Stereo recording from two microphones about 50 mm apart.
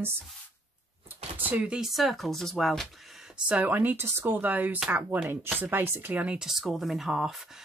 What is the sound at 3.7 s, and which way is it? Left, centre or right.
Speech, right.